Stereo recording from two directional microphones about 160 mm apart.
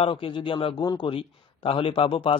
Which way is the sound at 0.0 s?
30° left (ahead or behind).